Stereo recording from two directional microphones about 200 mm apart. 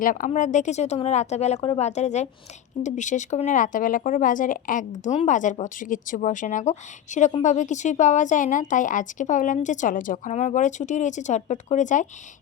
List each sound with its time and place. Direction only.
0.0 s speech: 40° left (ahead or behind)